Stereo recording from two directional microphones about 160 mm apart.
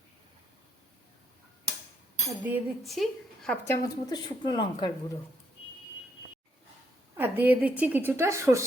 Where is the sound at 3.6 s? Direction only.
20° left (ahead or behind).